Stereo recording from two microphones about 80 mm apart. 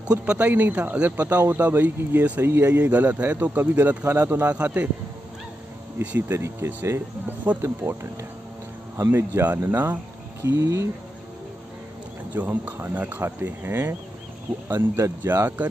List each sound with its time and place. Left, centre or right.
0.2 s speech: centre
4.5 s speech: centre
5.9 s speech: right
10.4 s speech: right
12.4 s speech: right